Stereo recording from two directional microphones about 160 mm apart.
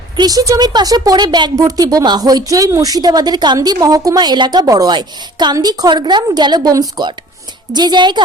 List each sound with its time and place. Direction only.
0.2 s speech: 25° right (ahead or behind)